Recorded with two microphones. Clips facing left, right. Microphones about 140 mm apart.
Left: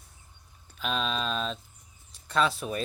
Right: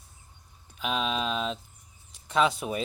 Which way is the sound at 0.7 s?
10° right (ahead or behind).